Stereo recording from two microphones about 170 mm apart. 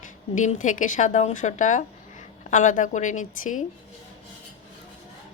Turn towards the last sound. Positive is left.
turn(degrees=50)  # may be behind; listen again after turning